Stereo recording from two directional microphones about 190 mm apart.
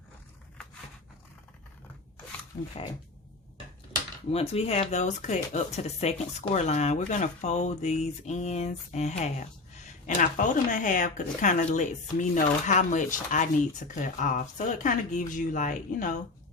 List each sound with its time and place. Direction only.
4.3 s speech: 30° left (ahead or behind)